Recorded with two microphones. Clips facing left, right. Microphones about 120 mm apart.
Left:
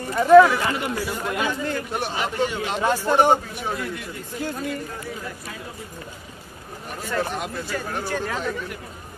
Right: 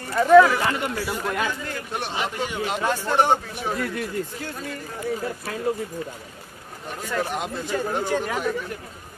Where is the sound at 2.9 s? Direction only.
10° left (ahead or behind).